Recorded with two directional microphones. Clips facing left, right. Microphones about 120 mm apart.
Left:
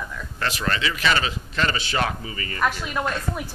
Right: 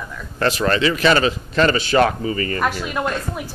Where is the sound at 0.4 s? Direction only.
40° right (ahead or behind).